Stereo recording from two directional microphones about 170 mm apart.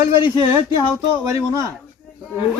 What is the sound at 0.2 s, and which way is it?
Speech, 35° left (ahead or behind).